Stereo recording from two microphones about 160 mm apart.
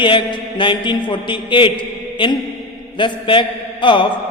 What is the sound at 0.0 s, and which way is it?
Mantra, 30° left (ahead or behind).